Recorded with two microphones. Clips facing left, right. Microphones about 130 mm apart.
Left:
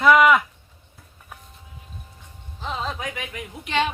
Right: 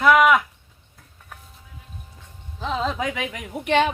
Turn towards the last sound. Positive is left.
turn(degrees=-50)  # may be behind; listen again after turning